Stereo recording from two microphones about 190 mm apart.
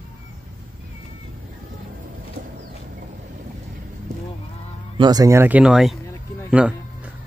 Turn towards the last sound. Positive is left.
turn(degrees=-5)  # may be behind; listen again after turning